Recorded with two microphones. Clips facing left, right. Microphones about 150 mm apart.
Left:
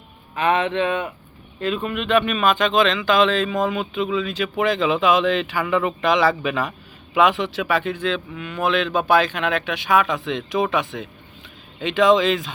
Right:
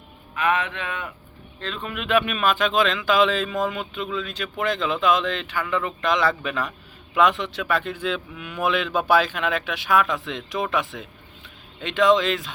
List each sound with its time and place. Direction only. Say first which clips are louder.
0.3 s speech: left 5 dB; 30° left (ahead or behind)
1.6 s speech: left 7 dB; 5° left (ahead or behind)